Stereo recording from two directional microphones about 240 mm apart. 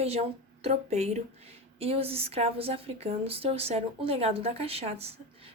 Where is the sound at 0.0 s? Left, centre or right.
Right.